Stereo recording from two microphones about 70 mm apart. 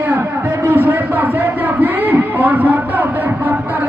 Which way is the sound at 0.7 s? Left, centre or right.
Right.